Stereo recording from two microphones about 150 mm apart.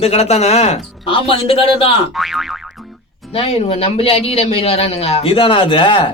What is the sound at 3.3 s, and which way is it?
Speech, 40° left (ahead or behind).